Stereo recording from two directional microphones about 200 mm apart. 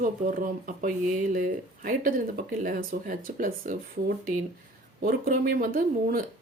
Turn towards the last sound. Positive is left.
turn(degrees=-45)  # may be behind; listen again after turning